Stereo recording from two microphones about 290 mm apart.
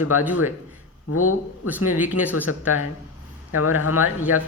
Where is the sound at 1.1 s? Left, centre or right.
Left.